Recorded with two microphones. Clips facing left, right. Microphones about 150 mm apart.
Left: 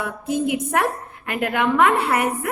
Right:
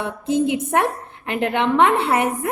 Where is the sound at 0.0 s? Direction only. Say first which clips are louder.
Right 3 dB; 25° right (ahead or behind).